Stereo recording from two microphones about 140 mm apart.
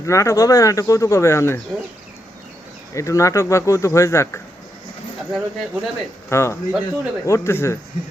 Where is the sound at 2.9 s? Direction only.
20° left (ahead or behind).